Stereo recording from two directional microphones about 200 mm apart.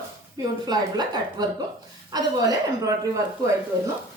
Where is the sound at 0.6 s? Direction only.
20° right (ahead or behind).